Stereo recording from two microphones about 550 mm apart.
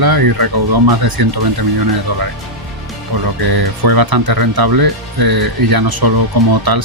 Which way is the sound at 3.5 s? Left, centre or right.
Right.